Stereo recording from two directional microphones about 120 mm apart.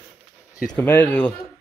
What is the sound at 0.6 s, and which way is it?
Speech, 15° left (ahead or behind).